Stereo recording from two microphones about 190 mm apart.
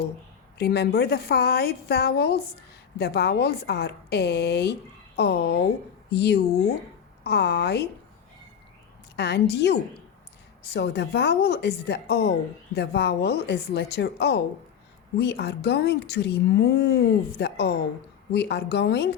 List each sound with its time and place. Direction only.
0.6 s speech: 60° left (ahead or behind)
9.1 s speech: 65° left (ahead or behind)